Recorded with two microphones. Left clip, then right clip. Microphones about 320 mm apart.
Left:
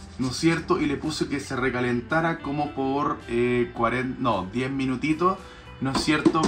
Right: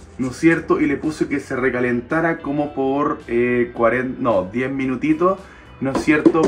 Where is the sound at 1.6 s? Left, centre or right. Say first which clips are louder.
Right 6 dB; right.